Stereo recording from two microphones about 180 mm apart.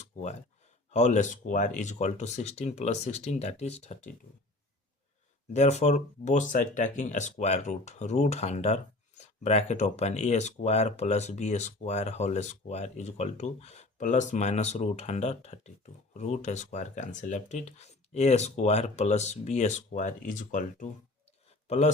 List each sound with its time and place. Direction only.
0.0 s a sound: 40° left (ahead or behind)
0.9 s speech: 40° left (ahead or behind)
5.5 s speech: 40° left (ahead or behind)